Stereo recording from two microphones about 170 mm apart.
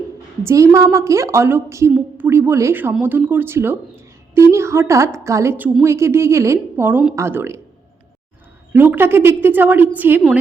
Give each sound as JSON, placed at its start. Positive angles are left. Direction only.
{"t": 0.4, "sound": "a woman's voice", "side_deg": -15}
{"t": 8.7, "sound": "a woman's voice", "side_deg": -10}